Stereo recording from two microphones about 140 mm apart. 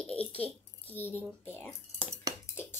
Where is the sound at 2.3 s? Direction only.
25° right (ahead or behind).